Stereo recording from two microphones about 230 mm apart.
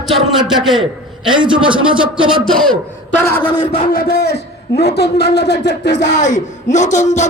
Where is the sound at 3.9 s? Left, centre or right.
Left.